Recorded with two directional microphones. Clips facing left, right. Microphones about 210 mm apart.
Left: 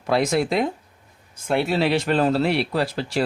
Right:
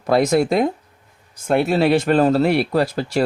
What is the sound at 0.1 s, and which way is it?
Speech, 45° right (ahead or behind).